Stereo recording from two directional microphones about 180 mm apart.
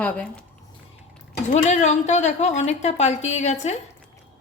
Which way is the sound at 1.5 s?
40° left (ahead or behind).